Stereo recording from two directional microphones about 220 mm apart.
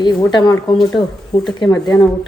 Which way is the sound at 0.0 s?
20° left (ahead or behind).